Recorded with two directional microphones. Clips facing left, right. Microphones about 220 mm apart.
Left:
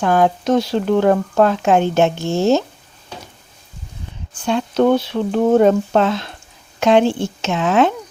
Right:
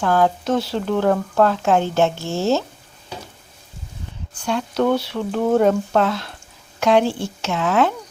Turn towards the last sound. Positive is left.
turn(degrees=20)  # may be behind; listen again after turning